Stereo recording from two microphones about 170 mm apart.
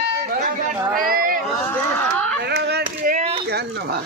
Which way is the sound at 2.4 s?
70° right (ahead or behind).